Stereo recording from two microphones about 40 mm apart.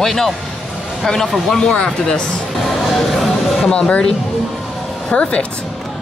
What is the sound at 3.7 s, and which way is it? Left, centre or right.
Speech, left.